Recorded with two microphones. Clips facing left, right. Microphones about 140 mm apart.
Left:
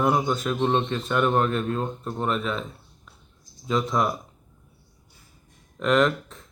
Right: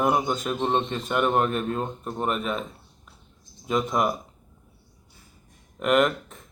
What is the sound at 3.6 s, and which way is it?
Speech, 15° right (ahead or behind).